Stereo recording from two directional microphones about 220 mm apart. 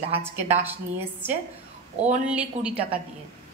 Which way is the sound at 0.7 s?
10° right (ahead or behind).